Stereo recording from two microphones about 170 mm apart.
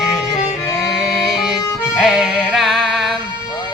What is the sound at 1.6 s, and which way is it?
Music, 20° left (ahead or behind).